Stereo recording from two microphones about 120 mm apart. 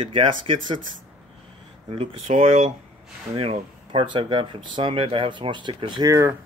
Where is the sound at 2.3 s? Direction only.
60° right (ahead or behind); by 6.1 s 40° right (ahead or behind).